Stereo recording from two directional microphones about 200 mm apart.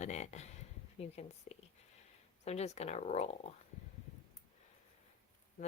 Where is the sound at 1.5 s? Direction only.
35° left (ahead or behind).